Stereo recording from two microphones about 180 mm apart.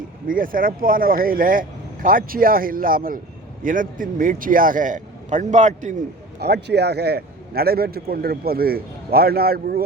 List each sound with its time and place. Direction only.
0.3 s speech: 50° right (ahead or behind)
6.4 s a man's voice: 65° right (ahead or behind)